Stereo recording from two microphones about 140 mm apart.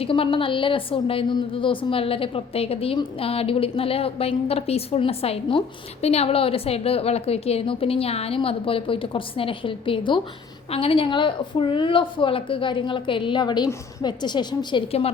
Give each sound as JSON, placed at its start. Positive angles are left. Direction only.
{"t": 0.0, "sound": "a woman's voice", "side_deg": 40}